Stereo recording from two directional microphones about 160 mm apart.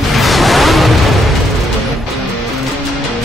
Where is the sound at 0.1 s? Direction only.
Centre (ahead or behind).